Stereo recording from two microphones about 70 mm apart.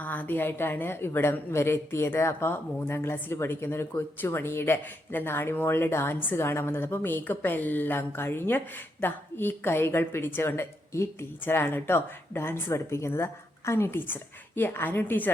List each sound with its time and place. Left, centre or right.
0.0 s a woman's voice: left